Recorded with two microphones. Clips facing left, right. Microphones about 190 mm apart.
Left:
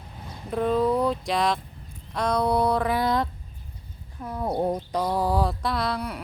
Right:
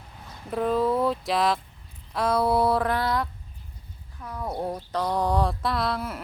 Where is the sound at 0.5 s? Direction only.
Centre (ahead or behind).